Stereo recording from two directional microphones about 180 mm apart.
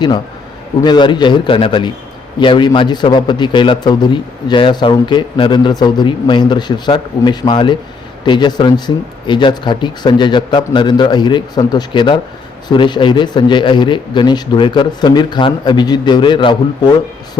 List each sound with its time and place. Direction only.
0.8 s a man's voice: 25° left (ahead or behind)